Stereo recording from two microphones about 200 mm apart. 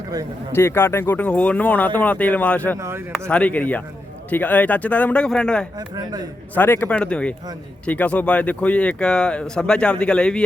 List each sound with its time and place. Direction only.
0.5 s speech: 10° left (ahead or behind)
6.0 s a man's voice: 20° right (ahead or behind)
6.5 s speech: 10° left (ahead or behind)